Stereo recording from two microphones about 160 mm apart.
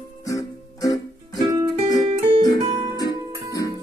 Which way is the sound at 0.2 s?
20° left (ahead or behind).